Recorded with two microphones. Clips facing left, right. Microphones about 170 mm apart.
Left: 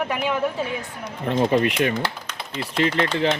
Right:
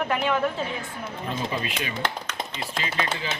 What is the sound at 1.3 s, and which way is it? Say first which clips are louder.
Speech: left 11 dB; 65° left (ahead or behind).